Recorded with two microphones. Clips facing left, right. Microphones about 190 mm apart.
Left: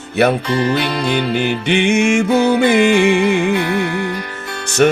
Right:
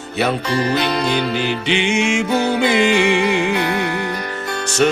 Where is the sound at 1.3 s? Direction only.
55° left (ahead or behind).